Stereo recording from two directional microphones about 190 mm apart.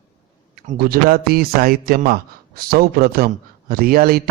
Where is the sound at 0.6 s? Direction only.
50° right (ahead or behind).